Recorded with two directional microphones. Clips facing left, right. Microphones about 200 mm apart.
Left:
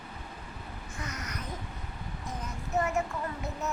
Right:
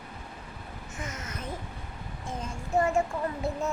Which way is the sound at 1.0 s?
25° right (ahead or behind).